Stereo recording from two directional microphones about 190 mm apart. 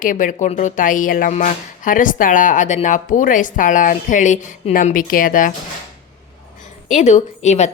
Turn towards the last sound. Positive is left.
turn(degrees=35)  # may be behind; listen again after turning